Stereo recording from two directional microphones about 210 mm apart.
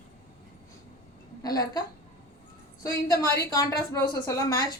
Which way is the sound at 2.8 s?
15° left (ahead or behind).